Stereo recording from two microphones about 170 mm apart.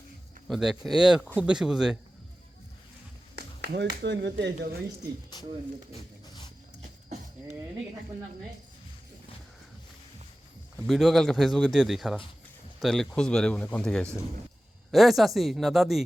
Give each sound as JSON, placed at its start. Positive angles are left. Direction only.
{"t": 0.4, "sound": "speech", "side_deg": 0}
{"t": 3.3, "sound": "speech", "side_deg": -75}
{"t": 5.3, "sound": "a sound", "side_deg": 25}
{"t": 10.8, "sound": "speech", "side_deg": 0}